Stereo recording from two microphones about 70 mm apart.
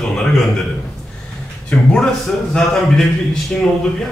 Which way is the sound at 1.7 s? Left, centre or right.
Centre.